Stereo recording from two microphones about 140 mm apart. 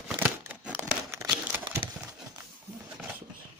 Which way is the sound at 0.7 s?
20° right (ahead or behind).